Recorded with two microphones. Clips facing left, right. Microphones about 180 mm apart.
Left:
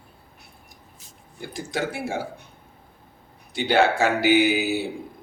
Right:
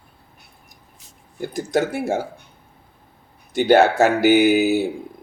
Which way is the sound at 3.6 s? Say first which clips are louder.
Right 6 dB; 45° right (ahead or behind).